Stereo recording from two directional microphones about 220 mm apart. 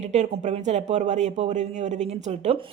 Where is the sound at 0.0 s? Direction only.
30° right (ahead or behind).